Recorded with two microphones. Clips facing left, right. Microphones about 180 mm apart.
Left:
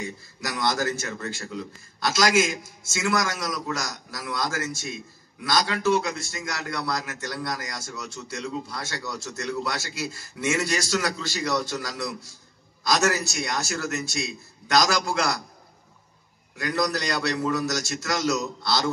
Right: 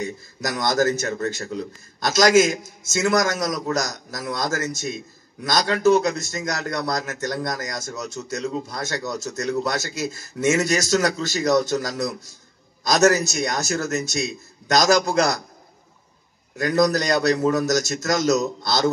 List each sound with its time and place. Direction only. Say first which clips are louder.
0.0 s speech: right 6 dB; 40° right (ahead or behind)
16.5 s speech: right 7 dB; 45° right (ahead or behind)